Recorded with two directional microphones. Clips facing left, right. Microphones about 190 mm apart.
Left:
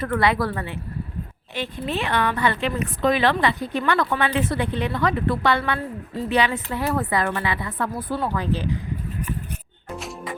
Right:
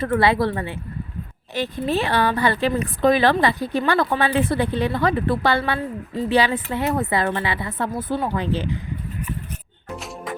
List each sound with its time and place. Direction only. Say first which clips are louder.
0.0 s speech: right 3 dB; 30° right (ahead or behind)
1.5 s a woman's voice: right 4 dB; 40° right (ahead or behind)
6.7 s speech: right 2 dB; 20° right (ahead or behind)